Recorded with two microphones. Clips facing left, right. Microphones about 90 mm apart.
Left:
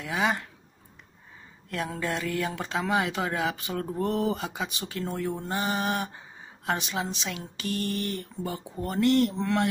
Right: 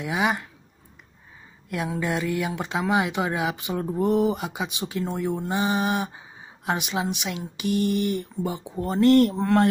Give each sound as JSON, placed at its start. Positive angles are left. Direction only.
{"t": 0.0, "sound": "speech", "side_deg": -15}
{"t": 1.7, "sound": "speech", "side_deg": -10}
{"t": 9.0, "sound": "speech", "side_deg": -45}